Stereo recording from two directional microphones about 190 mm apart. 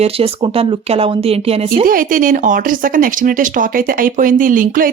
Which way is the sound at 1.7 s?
50° right (ahead or behind).